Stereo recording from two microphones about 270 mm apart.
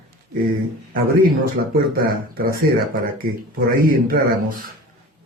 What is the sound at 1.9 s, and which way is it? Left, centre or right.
Speech, right.